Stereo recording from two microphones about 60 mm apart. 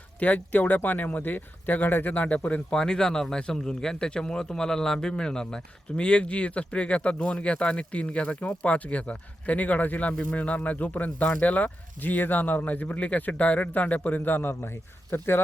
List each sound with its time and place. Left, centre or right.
0.2 s speech: left
2.7 s speech: centre; by 15.4 s left